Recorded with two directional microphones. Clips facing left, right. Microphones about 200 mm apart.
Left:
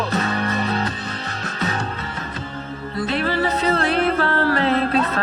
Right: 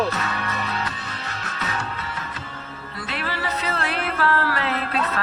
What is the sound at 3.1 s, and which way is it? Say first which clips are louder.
Music: left 7 dB; 35° left (ahead or behind).